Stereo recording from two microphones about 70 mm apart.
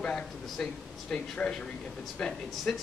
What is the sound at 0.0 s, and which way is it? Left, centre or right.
A man's voice, centre.